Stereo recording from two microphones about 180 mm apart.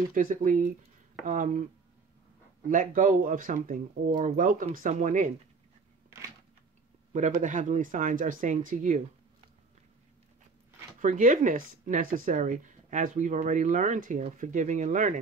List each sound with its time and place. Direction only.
0.1 s speech: 45° right (ahead or behind)
2.7 s speech: 45° right (ahead or behind)
7.1 s speech: 40° right (ahead or behind)
11.0 s speech: 45° right (ahead or behind)